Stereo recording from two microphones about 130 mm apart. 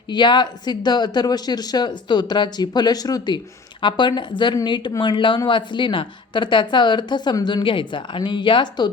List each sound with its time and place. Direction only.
0.1 s speech: 35° left (ahead or behind)